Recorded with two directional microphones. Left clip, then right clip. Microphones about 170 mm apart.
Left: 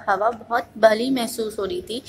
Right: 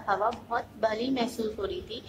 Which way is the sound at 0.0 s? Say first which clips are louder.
Left 7 dB; 35° left (ahead or behind).